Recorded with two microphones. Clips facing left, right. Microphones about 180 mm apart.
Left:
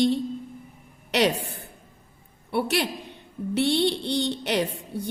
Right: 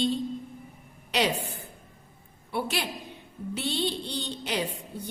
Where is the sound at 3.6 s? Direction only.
70° left (ahead or behind).